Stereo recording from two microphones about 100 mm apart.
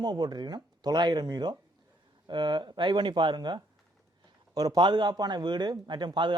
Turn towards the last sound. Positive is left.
turn(degrees=-50)  # may be behind; listen again after turning